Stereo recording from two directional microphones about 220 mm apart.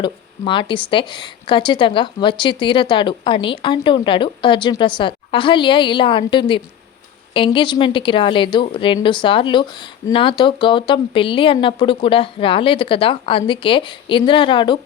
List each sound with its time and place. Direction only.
0.0 s speech: 20° left (ahead or behind)